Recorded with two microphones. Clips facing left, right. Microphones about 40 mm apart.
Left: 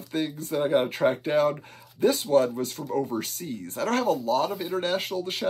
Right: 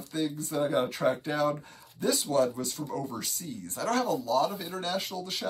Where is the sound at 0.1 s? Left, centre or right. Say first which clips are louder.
Left 3 dB; left.